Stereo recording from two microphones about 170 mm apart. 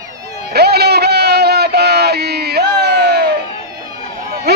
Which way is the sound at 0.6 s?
70° right (ahead or behind).